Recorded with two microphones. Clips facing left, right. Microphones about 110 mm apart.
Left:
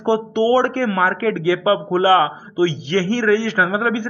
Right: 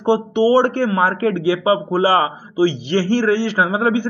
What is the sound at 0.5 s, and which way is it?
A man's voice, 30° right (ahead or behind).